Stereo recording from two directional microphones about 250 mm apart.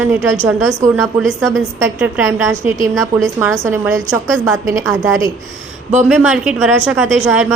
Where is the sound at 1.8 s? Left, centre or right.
Centre.